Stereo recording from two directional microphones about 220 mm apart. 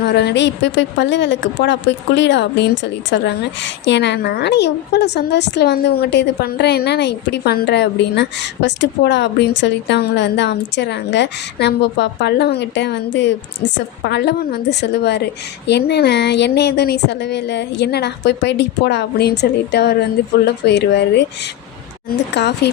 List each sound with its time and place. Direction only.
0.0 s a woman's voice: 50° left (ahead or behind)
22.3 s a woman's voice: 50° left (ahead or behind)